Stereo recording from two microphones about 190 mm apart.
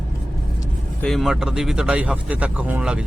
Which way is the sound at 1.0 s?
Centre (ahead or behind).